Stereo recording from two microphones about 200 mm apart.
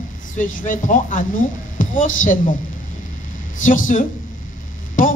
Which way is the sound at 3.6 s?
40° left (ahead or behind).